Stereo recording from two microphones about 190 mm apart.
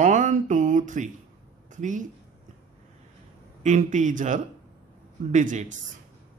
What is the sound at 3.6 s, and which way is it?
Speech, 40° right (ahead or behind).